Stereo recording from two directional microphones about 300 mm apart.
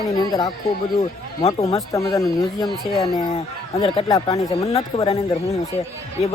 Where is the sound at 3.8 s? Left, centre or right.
Centre.